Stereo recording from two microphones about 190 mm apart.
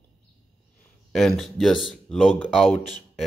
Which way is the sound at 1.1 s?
Centre (ahead or behind).